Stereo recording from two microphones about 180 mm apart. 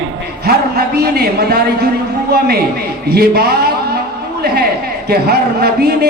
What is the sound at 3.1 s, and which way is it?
Speech, 60° right (ahead or behind).